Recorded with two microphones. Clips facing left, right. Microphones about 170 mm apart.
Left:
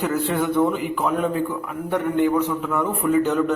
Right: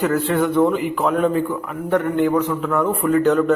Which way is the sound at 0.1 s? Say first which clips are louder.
Right 3 dB; 5° left (ahead or behind).